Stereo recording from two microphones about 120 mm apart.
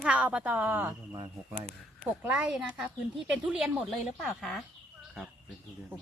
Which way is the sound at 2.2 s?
10° right (ahead or behind).